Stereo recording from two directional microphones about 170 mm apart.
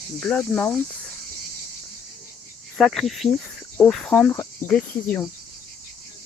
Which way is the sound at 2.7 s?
Centre (ahead or behind).